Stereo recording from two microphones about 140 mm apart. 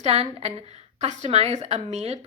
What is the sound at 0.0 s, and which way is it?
A woman's voice, 45° right (ahead or behind).